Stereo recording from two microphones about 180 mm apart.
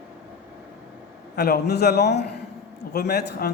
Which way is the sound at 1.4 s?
60° left (ahead or behind).